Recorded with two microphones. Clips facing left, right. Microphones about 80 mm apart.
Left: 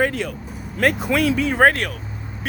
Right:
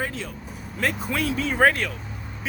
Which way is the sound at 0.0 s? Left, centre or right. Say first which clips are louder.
Left 9 dB; left.